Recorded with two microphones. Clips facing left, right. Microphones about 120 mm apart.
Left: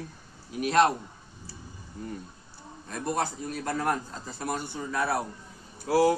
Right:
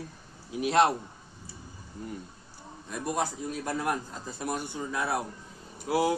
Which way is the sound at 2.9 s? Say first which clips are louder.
Left 1 dB; 10° right (ahead or behind).